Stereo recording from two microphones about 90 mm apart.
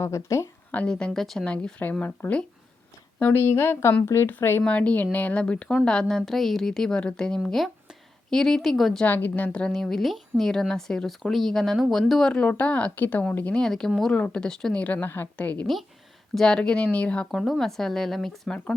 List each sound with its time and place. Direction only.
0.0 s speech: 35° left (ahead or behind)
0.7 s a woman's voice: 15° left (ahead or behind)
9.0 s a woman's voice: 20° left (ahead or behind)
17.3 s speech: centre (ahead or behind)